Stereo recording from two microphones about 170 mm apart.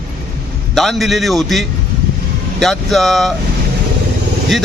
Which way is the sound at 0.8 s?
Centre (ahead or behind).